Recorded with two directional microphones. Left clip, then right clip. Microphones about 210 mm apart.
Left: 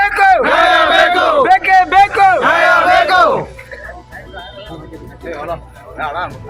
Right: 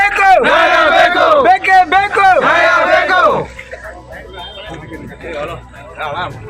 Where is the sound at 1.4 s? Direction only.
55° right (ahead or behind).